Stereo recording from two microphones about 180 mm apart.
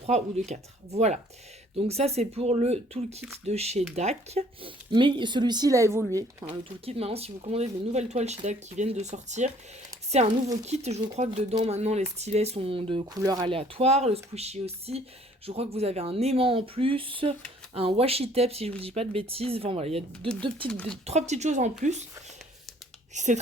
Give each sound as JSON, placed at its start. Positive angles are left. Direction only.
{"t": 0.0, "sound": "speech", "side_deg": -40}
{"t": 6.8, "sound": "speech", "side_deg": -35}
{"t": 10.2, "sound": "speech", "side_deg": -25}
{"t": 10.7, "sound": "speech", "side_deg": -35}
{"t": 20.7, "sound": "speech", "side_deg": 5}
{"t": 21.0, "sound": "speech", "side_deg": -40}
{"t": 23.1, "sound": "speech", "side_deg": -40}